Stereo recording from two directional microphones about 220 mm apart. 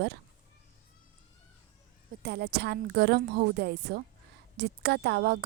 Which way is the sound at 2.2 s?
45° right (ahead or behind).